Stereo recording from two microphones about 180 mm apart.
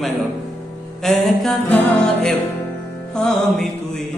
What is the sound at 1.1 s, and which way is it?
Music, centre (ahead or behind).